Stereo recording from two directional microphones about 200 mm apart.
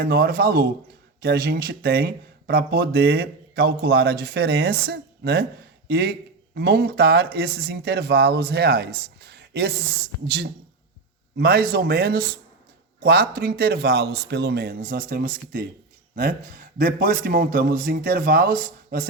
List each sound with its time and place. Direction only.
0.0 s speech: 45° right (ahead or behind)